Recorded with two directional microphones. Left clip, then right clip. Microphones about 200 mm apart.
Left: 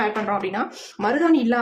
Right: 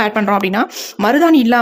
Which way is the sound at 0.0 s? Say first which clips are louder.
Right 8 dB; 60° right (ahead or behind).